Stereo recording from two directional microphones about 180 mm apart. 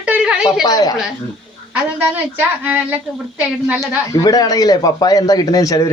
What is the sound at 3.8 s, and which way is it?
Speech, 20° left (ahead or behind).